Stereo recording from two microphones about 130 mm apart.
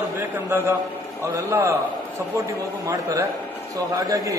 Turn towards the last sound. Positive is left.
turn(degrees=-25)  # may be behind; listen again after turning